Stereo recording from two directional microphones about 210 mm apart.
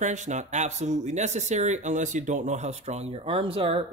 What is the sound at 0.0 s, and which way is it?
Speech, 35° right (ahead or behind).